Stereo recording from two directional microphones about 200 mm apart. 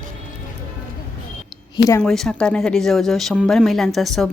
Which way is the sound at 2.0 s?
Centre (ahead or behind).